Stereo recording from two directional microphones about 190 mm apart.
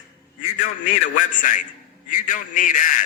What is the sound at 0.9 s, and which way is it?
A man's voice, 40° left (ahead or behind).